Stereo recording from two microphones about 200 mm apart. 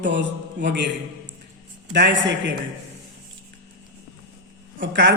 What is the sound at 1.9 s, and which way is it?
Speech, 55° right (ahead or behind).